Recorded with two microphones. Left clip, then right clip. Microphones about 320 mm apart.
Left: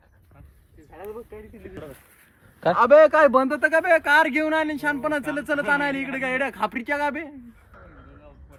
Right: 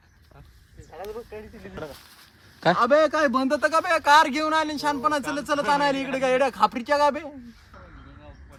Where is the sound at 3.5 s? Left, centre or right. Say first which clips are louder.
Left 3 dB; centre.